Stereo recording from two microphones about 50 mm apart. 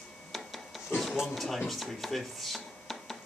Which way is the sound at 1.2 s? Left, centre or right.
Centre.